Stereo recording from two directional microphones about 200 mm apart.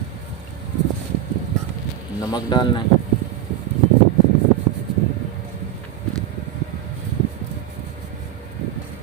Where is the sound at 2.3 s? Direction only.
20° left (ahead or behind).